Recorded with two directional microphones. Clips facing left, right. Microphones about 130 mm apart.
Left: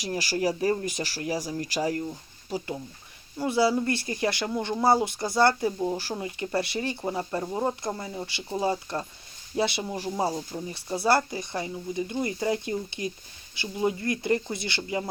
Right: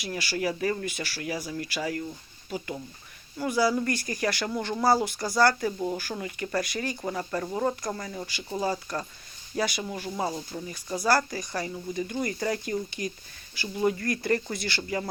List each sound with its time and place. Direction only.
0.0 s speech: 40° left (ahead or behind)
3.3 s speech: 25° left (ahead or behind)